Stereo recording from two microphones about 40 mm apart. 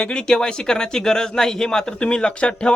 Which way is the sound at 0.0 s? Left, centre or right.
Left.